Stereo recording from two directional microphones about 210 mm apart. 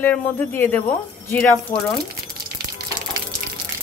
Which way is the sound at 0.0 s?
5° left (ahead or behind).